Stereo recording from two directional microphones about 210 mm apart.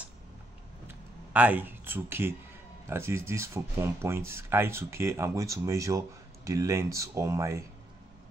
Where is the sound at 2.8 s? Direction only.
10° right (ahead or behind).